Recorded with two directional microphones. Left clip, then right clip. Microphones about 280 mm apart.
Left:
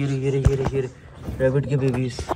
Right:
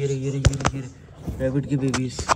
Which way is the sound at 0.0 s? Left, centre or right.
Left.